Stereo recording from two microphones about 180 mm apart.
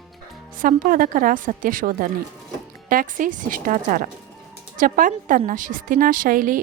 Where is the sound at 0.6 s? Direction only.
50° right (ahead or behind).